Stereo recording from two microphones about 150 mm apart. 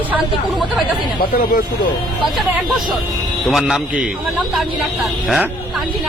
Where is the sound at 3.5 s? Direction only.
5° right (ahead or behind).